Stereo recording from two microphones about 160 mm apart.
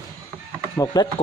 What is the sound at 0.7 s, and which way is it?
Speech, 25° left (ahead or behind).